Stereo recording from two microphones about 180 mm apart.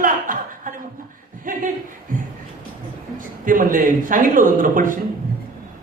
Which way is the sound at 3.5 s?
50° right (ahead or behind).